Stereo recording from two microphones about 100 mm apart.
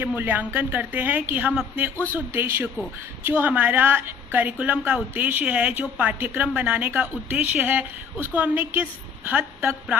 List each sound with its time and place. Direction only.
0.2 s a woman's voice: 20° right (ahead or behind)
2.1 s a woman's voice: 25° right (ahead or behind)